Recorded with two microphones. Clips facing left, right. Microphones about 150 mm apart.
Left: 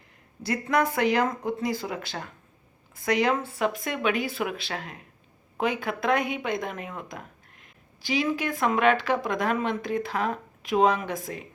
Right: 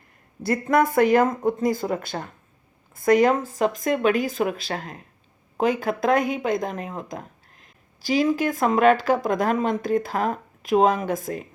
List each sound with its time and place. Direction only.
0.4 s speech: 50° right (ahead or behind)